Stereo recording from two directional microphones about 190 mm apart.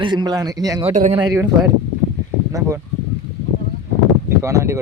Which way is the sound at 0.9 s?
40° right (ahead or behind).